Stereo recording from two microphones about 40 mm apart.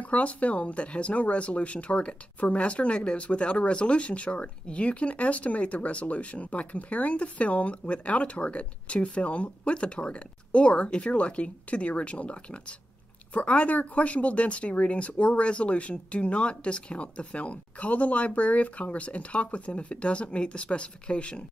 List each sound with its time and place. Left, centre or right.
0.0 s speech: left